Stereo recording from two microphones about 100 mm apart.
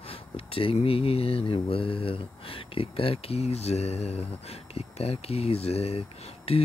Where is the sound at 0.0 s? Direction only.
70° left (ahead or behind).